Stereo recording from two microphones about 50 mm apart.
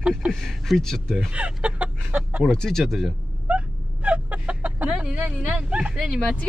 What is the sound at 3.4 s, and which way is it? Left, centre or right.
Chicken, right.